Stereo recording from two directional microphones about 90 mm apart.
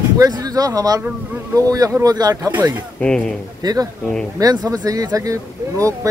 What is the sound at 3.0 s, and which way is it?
Speech, 10° left (ahead or behind).